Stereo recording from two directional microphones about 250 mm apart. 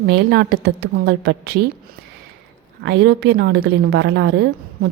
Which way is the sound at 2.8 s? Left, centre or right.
Right.